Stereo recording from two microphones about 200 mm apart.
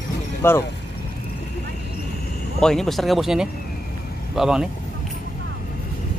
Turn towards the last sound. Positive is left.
turn(degrees=-5)  # may be behind; listen again after turning